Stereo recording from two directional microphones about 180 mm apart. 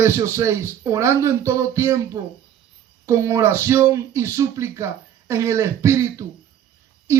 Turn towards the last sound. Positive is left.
turn(degrees=-15)  # may be behind; listen again after turning